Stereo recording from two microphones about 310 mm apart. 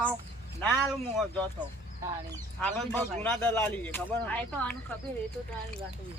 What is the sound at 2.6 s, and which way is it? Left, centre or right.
A man's voice, centre.